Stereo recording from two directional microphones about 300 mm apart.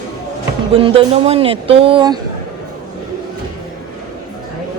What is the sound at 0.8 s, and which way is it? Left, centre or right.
Speech, centre.